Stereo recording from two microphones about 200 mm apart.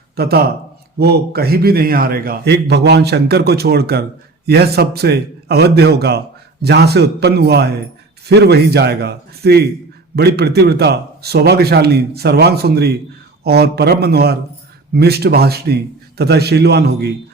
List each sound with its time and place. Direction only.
0.2 s a man's voice: 50° right (ahead or behind)